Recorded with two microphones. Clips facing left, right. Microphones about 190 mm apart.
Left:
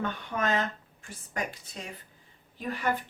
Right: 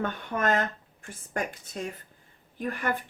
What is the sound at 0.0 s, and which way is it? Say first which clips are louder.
Speech: right 2 dB; 50° right (ahead or behind).